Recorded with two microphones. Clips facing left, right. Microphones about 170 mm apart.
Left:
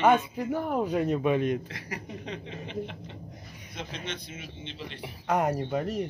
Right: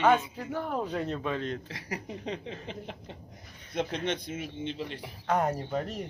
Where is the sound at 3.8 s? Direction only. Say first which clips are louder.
Right 7 dB; 55° right (ahead or behind).